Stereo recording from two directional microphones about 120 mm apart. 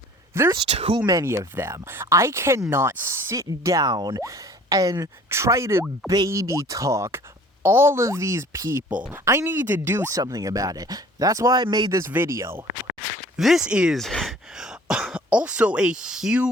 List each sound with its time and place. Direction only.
0.5 s speech: 55° right (ahead or behind)
1.0 s speech: 25° right (ahead or behind)
11.9 s speech: 20° right (ahead or behind)
13.3 s speech: 5° right (ahead or behind)